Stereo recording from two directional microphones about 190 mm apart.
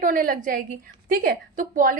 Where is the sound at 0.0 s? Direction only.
45° right (ahead or behind).